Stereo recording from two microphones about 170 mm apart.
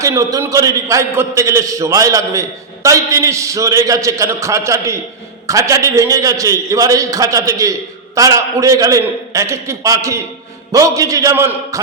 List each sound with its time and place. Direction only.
0.0 s a man's voice: 20° right (ahead or behind)